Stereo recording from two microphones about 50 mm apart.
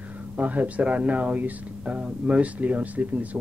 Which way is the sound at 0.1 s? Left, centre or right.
Right.